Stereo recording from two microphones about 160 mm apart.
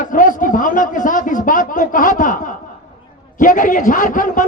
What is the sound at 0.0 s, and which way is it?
A man's voice, 55° left (ahead or behind).